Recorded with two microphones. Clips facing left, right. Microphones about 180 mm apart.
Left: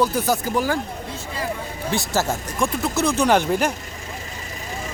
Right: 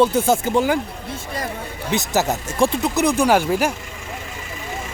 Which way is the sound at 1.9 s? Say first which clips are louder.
Right 3 dB; 15° right (ahead or behind).